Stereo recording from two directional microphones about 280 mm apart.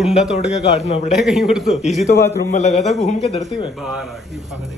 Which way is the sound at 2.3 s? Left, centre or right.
Left.